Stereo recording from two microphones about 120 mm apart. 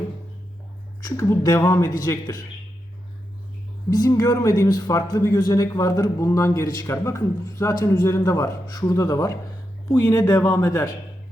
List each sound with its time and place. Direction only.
1.0 s speech: 25° left (ahead or behind)
3.8 s speech: 30° left (ahead or behind)